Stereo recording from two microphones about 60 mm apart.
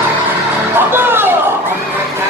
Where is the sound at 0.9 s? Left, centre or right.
Right.